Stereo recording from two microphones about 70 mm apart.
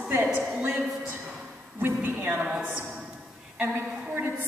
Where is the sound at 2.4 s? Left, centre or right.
Centre.